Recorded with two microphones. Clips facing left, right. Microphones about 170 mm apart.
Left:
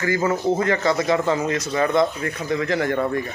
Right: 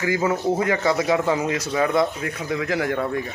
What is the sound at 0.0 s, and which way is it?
A man's voice, 10° right (ahead or behind).